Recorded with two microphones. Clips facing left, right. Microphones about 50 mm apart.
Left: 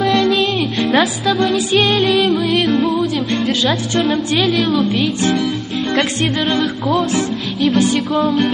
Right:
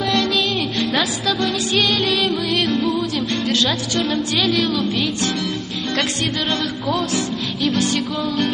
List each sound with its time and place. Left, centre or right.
0.0 s music: centre
0.3 s music: centre
1.2 s music: centre
6.5 s music: centre
7.7 s music: centre
8.1 s music: centre